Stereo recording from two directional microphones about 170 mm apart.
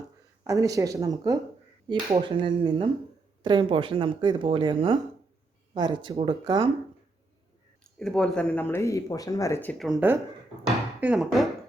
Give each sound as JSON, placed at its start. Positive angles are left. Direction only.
{"t": 0.4, "sound": "speech", "side_deg": -20}
{"t": 7.9, "sound": "speech", "side_deg": 5}
{"t": 11.0, "sound": "speech", "side_deg": -5}